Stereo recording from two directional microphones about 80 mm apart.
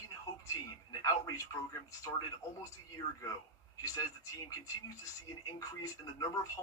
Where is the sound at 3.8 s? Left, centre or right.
Left.